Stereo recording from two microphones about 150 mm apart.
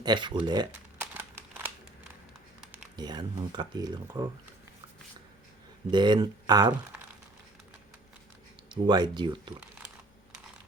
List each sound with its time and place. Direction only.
0.0 s speech: 30° right (ahead or behind)
0.9 s a sound: 15° right (ahead or behind)
2.9 s speech: 30° right (ahead or behind)
5.9 s speech: 30° right (ahead or behind)
8.7 s speech: 30° right (ahead or behind)